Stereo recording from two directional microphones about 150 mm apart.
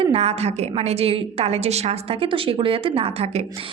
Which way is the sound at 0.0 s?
45° right (ahead or behind).